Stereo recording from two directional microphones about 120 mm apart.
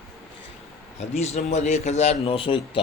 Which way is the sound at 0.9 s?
65° left (ahead or behind).